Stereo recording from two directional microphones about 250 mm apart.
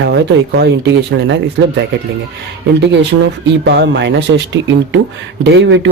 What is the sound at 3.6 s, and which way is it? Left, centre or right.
Speech, right.